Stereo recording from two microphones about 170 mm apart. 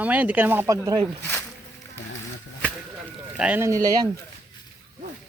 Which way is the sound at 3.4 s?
10° right (ahead or behind).